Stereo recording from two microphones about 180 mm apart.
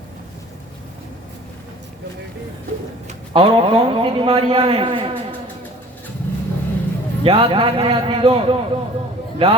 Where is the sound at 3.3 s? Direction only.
30° right (ahead or behind).